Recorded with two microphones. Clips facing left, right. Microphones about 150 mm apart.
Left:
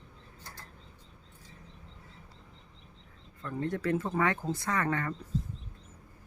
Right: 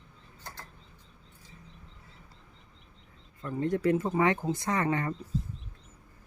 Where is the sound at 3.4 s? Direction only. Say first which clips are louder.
Right 5 dB; 15° right (ahead or behind).